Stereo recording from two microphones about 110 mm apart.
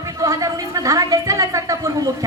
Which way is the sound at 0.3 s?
30° right (ahead or behind).